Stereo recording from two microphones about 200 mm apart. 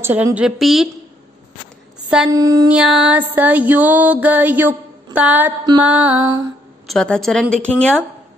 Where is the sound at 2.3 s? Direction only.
15° right (ahead or behind).